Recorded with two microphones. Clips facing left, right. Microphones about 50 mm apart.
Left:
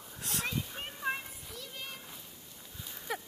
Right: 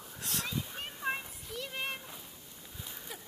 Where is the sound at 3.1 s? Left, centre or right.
Left.